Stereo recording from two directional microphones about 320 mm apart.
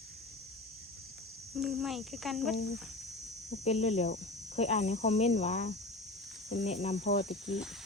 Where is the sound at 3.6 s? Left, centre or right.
Centre.